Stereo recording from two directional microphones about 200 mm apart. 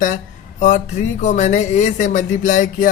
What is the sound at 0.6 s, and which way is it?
Speech, 40° left (ahead or behind).